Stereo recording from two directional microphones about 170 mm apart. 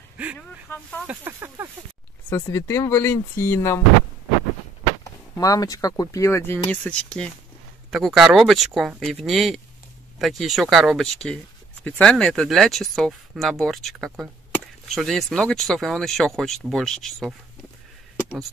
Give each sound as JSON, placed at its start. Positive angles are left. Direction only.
{"t": 0.4, "sound": "speech", "side_deg": 10}
{"t": 1.0, "sound": "speech", "side_deg": -15}
{"t": 2.2, "sound": "speech", "side_deg": 15}
{"t": 5.3, "sound": "speech", "side_deg": 20}